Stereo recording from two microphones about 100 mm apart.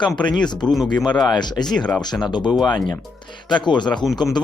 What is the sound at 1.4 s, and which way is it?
Speech, 45° left (ahead or behind).